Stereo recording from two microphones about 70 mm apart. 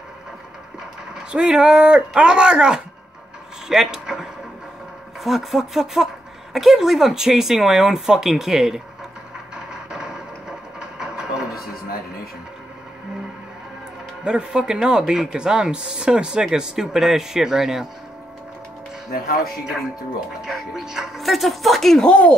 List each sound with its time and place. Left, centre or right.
1.3 s speech: centre
10.8 s a sound: centre
14.2 s speech: centre
20.4 s speech: centre